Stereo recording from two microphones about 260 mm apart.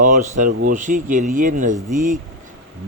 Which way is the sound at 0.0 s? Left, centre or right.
Right.